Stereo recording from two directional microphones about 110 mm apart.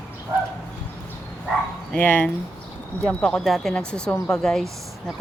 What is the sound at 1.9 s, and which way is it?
Speech, 10° left (ahead or behind).